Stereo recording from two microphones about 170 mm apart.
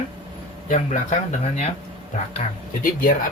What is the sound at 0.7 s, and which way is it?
Speech, 45° left (ahead or behind).